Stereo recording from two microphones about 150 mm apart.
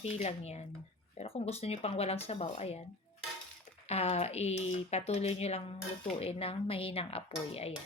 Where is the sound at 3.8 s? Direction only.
45° left (ahead or behind).